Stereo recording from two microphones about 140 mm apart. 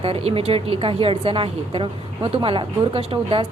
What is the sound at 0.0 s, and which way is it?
A woman's voice, 45° right (ahead or behind).